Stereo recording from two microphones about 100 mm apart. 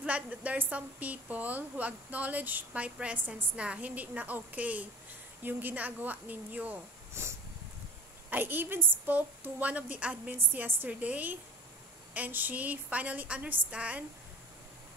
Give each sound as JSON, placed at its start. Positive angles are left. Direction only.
{"t": 0.0, "sound": "a woman's voice", "side_deg": -15}
{"t": 7.2, "sound": "a sound", "side_deg": -25}
{"t": 8.3, "sound": "a woman's voice", "side_deg": -20}